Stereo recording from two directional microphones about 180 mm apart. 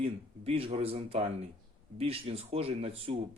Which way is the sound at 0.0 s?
30° right (ahead or behind).